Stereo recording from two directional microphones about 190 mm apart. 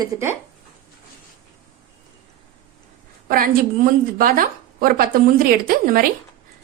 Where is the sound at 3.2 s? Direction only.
50° right (ahead or behind).